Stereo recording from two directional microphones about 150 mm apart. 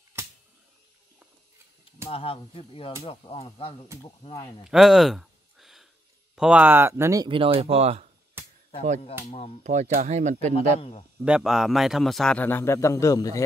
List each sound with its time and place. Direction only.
2.0 s speech: 40° left (ahead or behind)
4.6 s a sound: 5° right (ahead or behind)
6.3 s speech: 5° right (ahead or behind)
7.2 s speech: 35° right (ahead or behind)
8.4 s a sound: 15° right (ahead or behind)
9.2 s speech: 45° left (ahead or behind)
9.6 s speech: 55° right (ahead or behind)
10.5 s speech: 40° left (ahead or behind)
11.1 s a man's voice: 5° right (ahead or behind); by 13.4 s 20° left (ahead or behind)